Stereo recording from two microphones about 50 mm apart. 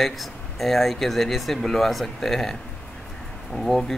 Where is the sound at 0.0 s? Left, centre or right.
Centre.